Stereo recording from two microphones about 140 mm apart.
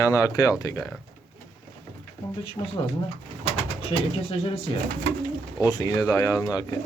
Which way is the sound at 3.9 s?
30° left (ahead or behind).